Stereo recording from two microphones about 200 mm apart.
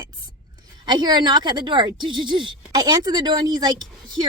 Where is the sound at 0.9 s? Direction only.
20° right (ahead or behind).